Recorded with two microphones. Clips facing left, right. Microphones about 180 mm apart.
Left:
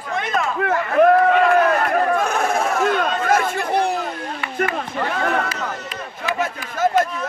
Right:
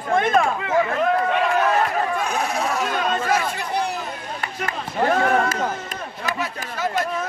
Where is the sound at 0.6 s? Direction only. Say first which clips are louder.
Left 4 dB; 55° left (ahead or behind).